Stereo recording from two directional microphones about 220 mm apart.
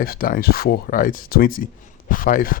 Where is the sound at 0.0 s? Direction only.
40° left (ahead or behind).